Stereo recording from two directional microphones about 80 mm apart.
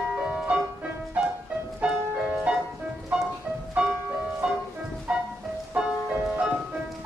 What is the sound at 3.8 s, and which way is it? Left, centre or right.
Music, centre.